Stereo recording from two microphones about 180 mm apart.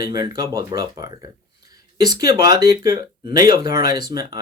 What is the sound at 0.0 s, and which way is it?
Speech, 25° right (ahead or behind).